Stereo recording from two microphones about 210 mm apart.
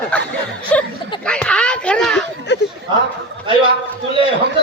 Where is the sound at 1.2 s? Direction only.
5° left (ahead or behind).